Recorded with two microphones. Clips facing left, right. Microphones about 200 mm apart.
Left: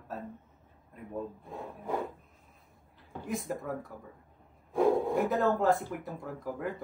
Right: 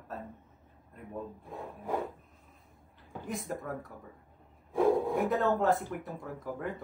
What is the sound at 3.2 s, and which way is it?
Speech, centre (ahead or behind).